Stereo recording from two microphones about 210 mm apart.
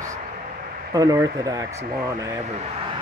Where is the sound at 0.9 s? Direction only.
15° right (ahead or behind).